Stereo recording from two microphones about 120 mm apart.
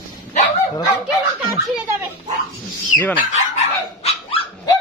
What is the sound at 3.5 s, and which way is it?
Dog, 65° left (ahead or behind).